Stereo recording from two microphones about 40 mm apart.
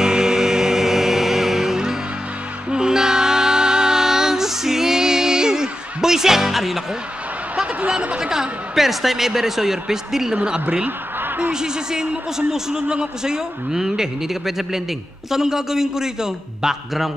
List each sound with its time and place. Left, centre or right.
0.0 s music: centre
8.2 s a man's voice: centre
10.3 s a man's voice: right